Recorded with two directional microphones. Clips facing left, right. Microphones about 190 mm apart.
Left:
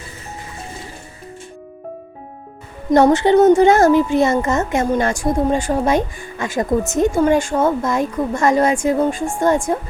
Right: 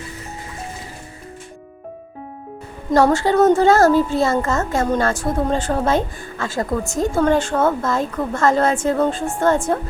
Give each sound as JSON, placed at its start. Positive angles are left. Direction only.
{"t": 2.9, "sound": "a woman's voice", "side_deg": 20}